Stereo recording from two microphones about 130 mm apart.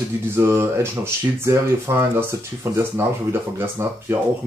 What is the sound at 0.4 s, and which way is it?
Speech, 20° right (ahead or behind).